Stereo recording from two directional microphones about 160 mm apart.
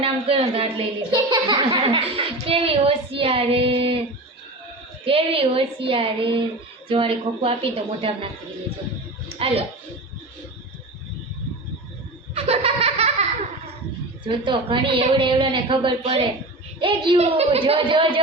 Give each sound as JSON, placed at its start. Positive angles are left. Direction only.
{"t": 0.0, "sound": "a woman's voice", "side_deg": -35}
{"t": 5.0, "sound": "a woman's voice", "side_deg": -35}
{"t": 9.4, "sound": "a woman's voice", "side_deg": -35}
{"t": 12.3, "sound": "laughter", "side_deg": -40}
{"t": 14.3, "sound": "a woman's voice", "side_deg": -30}